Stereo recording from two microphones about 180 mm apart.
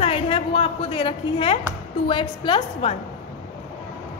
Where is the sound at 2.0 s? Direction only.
25° left (ahead or behind).